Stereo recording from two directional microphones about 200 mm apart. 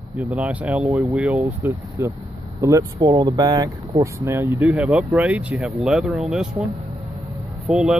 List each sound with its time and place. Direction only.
0.2 s speech: 5° right (ahead or behind)